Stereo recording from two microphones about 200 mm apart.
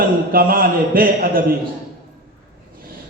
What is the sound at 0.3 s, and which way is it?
Speech, 45° right (ahead or behind).